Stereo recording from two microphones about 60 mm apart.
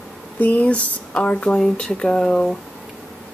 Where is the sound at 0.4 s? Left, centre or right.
Left.